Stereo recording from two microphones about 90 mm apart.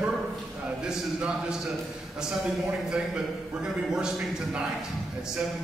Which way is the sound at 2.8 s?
5° right (ahead or behind).